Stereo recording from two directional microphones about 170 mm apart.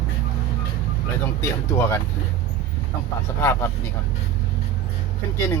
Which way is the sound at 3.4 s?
15° left (ahead or behind).